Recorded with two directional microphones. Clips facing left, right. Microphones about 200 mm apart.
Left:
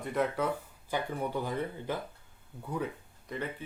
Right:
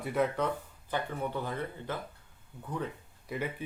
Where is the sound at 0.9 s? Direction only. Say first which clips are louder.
Left 1 dB; 10° left (ahead or behind).